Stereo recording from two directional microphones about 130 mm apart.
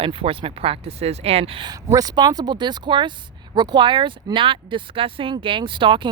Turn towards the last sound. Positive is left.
turn(degrees=-40)  # may be behind; listen again after turning